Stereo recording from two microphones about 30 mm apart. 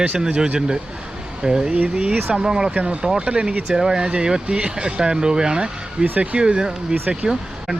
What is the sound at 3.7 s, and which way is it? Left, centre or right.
Speech, right.